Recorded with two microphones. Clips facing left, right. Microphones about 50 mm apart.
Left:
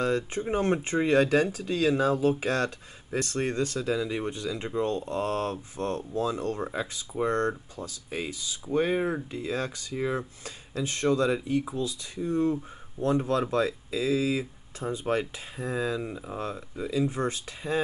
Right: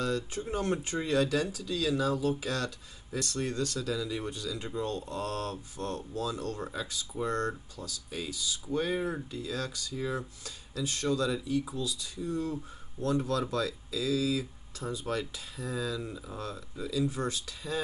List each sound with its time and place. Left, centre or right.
0.0 s speech: left